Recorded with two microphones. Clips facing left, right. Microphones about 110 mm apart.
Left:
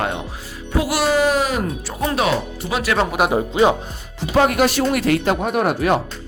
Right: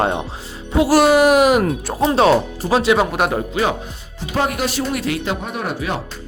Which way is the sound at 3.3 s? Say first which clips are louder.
Left 4 dB; 20° left (ahead or behind).